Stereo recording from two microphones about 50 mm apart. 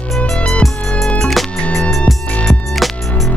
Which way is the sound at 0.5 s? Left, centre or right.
Centre.